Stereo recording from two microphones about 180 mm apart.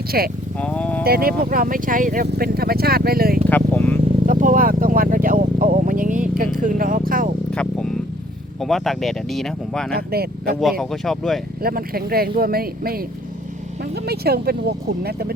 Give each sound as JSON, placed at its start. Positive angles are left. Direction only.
{"t": 0.1, "sound": "speech", "side_deg": -55}
{"t": 0.6, "sound": "speech", "side_deg": 5}
{"t": 1.0, "sound": "speech", "side_deg": -55}
{"t": 2.2, "sound": "speech", "side_deg": -60}
{"t": 3.5, "sound": "speech", "side_deg": 10}
{"t": 4.3, "sound": "vehicle", "side_deg": -50}
{"t": 7.5, "sound": "a sound", "side_deg": 5}
{"t": 8.6, "sound": "speech", "side_deg": 0}
{"t": 9.9, "sound": "speech", "side_deg": -60}
{"t": 10.6, "sound": "speech", "side_deg": 0}
{"t": 11.6, "sound": "speech", "side_deg": -55}